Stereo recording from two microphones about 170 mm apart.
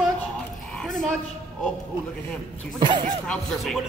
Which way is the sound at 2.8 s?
30° right (ahead or behind).